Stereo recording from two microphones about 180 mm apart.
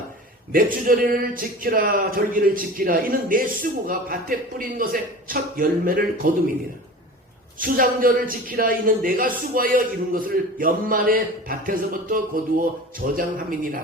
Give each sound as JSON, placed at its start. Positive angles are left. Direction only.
{"t": 0.5, "sound": "speech", "side_deg": -50}
{"t": 7.6, "sound": "speech", "side_deg": -50}